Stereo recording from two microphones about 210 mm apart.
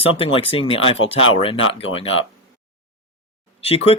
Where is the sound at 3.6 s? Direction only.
25° left (ahead or behind).